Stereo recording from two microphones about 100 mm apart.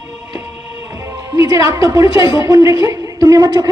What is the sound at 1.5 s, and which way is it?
A man's voice, 35° right (ahead or behind).